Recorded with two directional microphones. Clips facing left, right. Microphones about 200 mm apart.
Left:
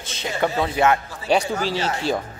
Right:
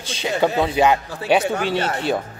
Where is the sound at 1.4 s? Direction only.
60° right (ahead or behind).